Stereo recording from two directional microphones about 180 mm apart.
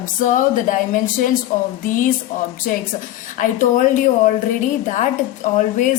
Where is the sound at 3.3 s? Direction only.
45° left (ahead or behind).